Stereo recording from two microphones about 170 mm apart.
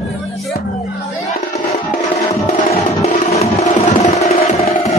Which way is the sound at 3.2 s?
40° left (ahead or behind).